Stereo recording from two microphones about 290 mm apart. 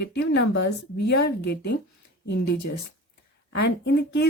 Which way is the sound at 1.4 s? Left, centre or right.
Left.